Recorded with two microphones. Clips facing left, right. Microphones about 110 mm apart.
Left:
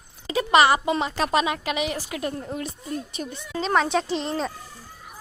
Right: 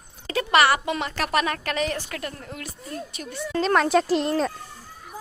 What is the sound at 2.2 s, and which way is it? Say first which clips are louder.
Speech: left 6 dB; 20° left (ahead or behind).